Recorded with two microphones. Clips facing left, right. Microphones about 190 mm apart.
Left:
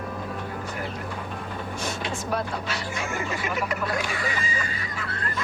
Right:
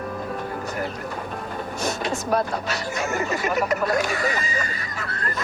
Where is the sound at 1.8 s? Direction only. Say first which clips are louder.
Right 6 dB; 40° right (ahead or behind).